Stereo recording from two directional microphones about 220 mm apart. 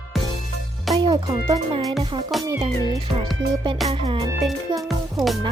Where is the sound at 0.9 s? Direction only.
20° right (ahead or behind).